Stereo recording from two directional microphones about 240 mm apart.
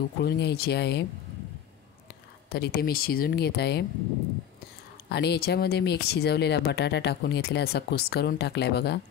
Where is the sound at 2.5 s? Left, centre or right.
Left.